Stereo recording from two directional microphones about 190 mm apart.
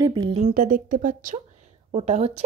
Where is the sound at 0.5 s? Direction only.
50° right (ahead or behind).